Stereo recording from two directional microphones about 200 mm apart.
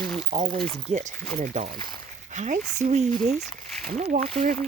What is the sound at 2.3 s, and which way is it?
Speech, 35° right (ahead or behind).